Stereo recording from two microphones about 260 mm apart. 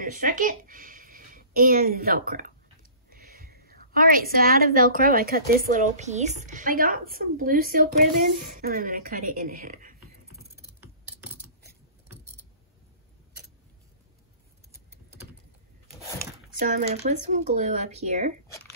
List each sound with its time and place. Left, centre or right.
0.0 s a woman's voice: right
10.5 s typing: centre
16.5 s speech: right